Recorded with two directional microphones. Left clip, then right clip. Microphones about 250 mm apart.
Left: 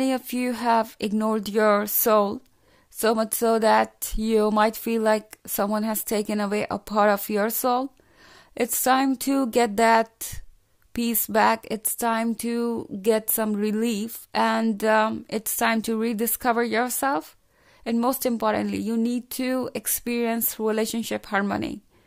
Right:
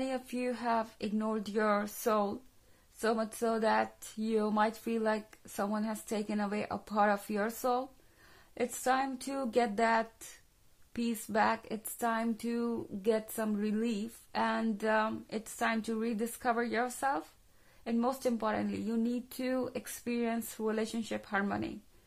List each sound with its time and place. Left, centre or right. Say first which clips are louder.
0.0 s speech: left 10 dB; left